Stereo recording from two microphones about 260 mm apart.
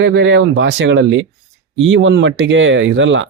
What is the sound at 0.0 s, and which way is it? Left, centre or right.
Speech, right.